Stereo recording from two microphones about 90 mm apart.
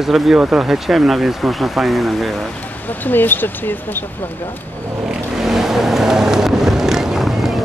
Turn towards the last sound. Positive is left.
turn(degrees=0)  # may be behind; listen again after turning